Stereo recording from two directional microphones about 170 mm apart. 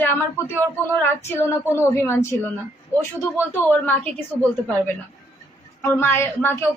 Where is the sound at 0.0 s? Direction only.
10° left (ahead or behind).